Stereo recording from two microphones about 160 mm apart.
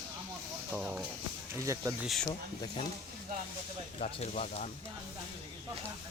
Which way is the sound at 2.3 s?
30° left (ahead or behind).